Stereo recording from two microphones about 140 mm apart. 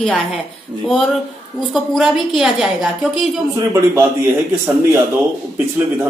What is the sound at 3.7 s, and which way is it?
Speech, 20° right (ahead or behind).